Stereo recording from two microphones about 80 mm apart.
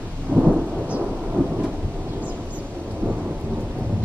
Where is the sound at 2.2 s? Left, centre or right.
Centre.